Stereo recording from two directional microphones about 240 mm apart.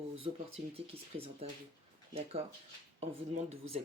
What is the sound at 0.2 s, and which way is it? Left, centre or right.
Speech, right.